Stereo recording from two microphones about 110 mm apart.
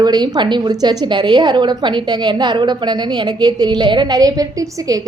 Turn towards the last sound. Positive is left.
turn(degrees=-35)  # may be behind; listen again after turning